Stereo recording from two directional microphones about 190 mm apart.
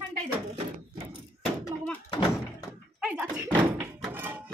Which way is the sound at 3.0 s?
5° right (ahead or behind).